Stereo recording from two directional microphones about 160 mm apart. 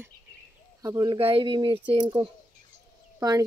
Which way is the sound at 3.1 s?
20° right (ahead or behind).